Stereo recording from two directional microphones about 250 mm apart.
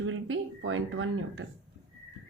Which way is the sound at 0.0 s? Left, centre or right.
Right.